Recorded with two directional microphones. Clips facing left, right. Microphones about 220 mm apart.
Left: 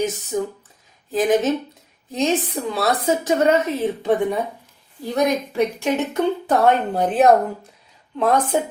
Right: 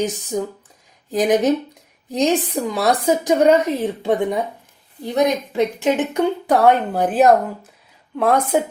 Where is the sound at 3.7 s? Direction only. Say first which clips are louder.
Even; 15° right (ahead or behind).